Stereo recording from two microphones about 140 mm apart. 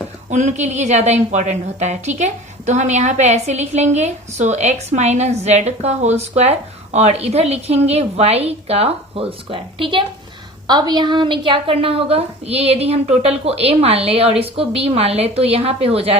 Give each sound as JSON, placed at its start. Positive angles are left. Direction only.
{"t": 0.3, "sound": "a woman's voice", "side_deg": -60}